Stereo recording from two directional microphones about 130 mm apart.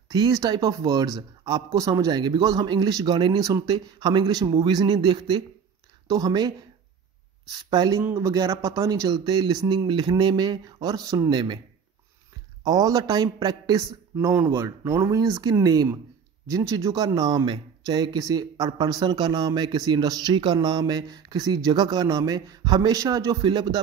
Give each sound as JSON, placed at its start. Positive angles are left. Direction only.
{"t": 0.1, "sound": "speech", "side_deg": -30}
{"t": 7.5, "sound": "speech", "side_deg": -30}
{"t": 12.6, "sound": "speech", "side_deg": -30}
{"t": 14.3, "sound": "speech", "side_deg": -15}